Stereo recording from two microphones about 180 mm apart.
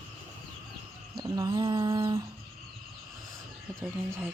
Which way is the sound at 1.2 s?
20° right (ahead or behind).